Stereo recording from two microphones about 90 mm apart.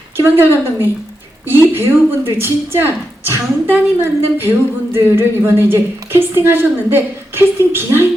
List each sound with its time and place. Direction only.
0.2 s a woman's voice: 25° right (ahead or behind)